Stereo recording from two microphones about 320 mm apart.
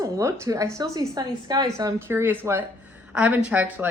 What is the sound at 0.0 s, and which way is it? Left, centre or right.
A woman's voice, centre.